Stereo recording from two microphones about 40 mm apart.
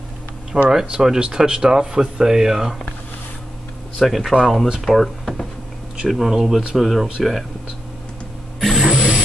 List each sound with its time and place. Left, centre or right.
0.5 s speech: right
1.0 s speech: centre
4.0 s speech: centre
6.0 s speech: centre
8.5 s a sound: centre
8.8 s a sound: centre